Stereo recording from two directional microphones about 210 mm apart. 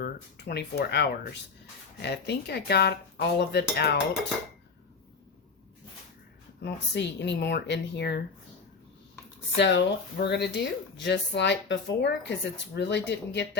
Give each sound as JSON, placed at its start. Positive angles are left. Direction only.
{"t": 0.0, "sound": "speech", "side_deg": 50}
{"t": 6.6, "sound": "speech", "side_deg": 55}
{"t": 9.6, "sound": "speech", "side_deg": 60}